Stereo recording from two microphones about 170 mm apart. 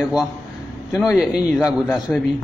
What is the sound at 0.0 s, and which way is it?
Speech, 5° right (ahead or behind).